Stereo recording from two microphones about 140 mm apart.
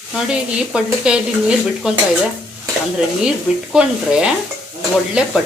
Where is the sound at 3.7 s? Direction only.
5° right (ahead or behind).